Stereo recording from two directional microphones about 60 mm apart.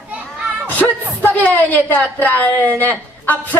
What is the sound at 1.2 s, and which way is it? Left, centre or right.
A woman's voice, left.